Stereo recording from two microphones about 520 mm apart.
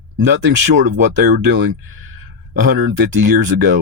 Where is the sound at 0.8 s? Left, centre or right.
Centre.